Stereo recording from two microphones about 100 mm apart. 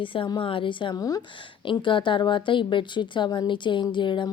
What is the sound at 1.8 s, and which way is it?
A woman's voice, 55° left (ahead or behind).